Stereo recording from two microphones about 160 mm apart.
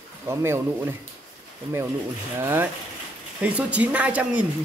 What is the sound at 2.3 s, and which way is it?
Speech, 15° right (ahead or behind).